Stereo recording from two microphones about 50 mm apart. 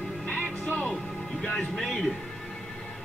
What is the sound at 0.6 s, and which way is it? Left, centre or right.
Music, left.